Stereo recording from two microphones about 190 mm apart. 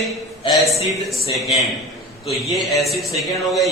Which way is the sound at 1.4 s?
Centre (ahead or behind).